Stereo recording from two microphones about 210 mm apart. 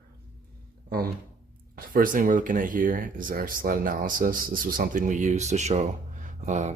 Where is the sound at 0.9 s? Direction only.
45° right (ahead or behind).